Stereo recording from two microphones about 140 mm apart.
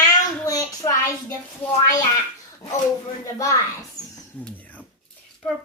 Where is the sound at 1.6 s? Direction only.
45° left (ahead or behind).